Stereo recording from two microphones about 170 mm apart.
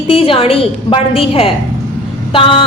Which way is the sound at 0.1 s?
35° left (ahead or behind).